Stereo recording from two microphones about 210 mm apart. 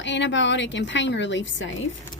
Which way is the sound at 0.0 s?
60° left (ahead or behind).